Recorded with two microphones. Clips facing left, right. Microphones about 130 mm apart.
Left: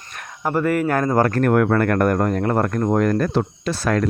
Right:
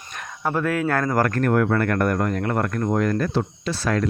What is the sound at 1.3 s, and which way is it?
Speech, 50° left (ahead or behind).